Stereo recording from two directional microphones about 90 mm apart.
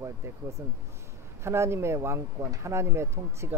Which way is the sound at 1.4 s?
30° right (ahead or behind).